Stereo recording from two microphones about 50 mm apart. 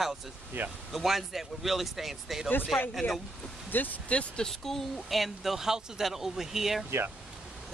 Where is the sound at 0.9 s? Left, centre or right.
Centre.